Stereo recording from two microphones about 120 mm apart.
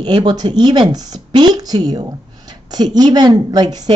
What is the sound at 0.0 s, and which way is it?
A woman's voice, 40° right (ahead or behind).